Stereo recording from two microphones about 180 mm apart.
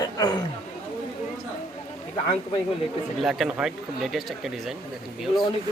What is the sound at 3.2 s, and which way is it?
Speech, centre (ahead or behind).